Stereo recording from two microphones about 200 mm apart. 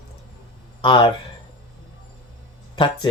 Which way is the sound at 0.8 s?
25° left (ahead or behind).